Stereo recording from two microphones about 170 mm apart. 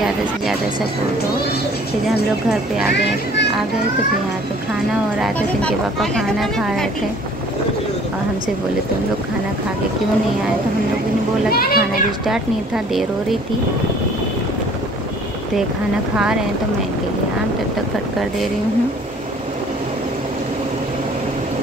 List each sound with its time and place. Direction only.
2.0 s speech: centre (ahead or behind)
5.2 s speech: 5° left (ahead or behind)
11.5 s a child's voice: 60° left (ahead or behind)
12.3 s speech: centre (ahead or behind)